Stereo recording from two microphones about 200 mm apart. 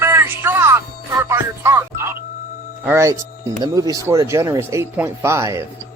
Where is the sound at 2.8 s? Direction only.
15° right (ahead or behind).